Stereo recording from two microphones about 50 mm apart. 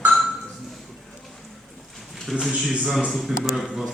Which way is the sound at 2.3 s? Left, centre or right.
Centre.